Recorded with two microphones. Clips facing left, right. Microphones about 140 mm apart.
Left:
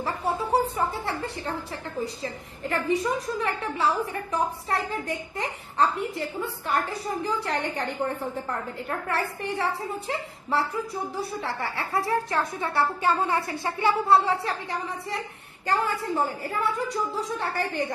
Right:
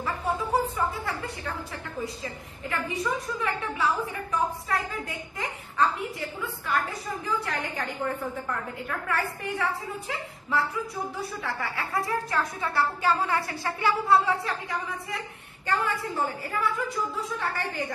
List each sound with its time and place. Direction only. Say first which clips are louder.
0.0 s a sound: left 1 dB; 35° left (ahead or behind)
2.2 s a woman's voice: left 4 dB; 35° left (ahead or behind)
7.2 s a woman's voice: left 1 dB; 30° left (ahead or behind)
15.6 s a woman's voice: left 2 dB; 35° left (ahead or behind)